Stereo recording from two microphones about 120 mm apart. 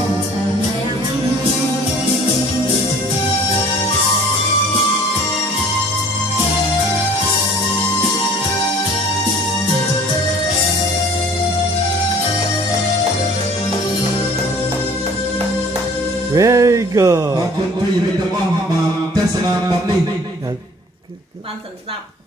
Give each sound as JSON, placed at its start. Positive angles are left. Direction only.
{"t": 16.3, "sound": "music", "side_deg": -25}